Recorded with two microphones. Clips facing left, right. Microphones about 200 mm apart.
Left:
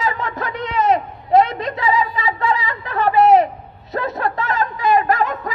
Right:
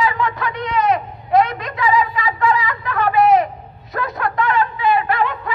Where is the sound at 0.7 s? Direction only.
25° left (ahead or behind); by 5.5 s 40° left (ahead or behind).